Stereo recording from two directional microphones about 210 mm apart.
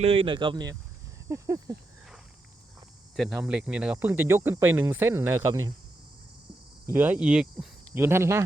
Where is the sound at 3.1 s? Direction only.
Centre (ahead or behind).